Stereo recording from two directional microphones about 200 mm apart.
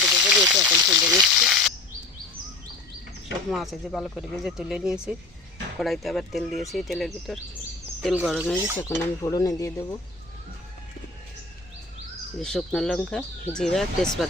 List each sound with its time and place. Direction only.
0.0 s a sound: 5° right (ahead or behind)
0.9 s speech: 5° right (ahead or behind)
3.5 s speech: centre (ahead or behind)
8.8 s speech: 20° left (ahead or behind)
12.4 s speech: centre (ahead or behind)